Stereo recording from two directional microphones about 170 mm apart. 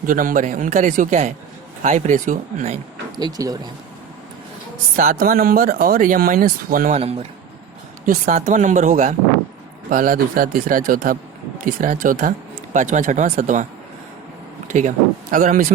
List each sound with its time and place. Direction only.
0.0 s a man's voice: 55° right (ahead or behind)
3.2 s speech: 20° right (ahead or behind)
4.9 s speech: 55° right (ahead or behind)
6.9 s a man's voice: 35° right (ahead or behind)
8.0 s a man's voice: 55° right (ahead or behind)
14.7 s a man's voice: 45° right (ahead or behind)